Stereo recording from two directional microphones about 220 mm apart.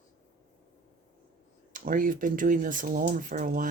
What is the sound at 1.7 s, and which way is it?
Speech, 40° right (ahead or behind).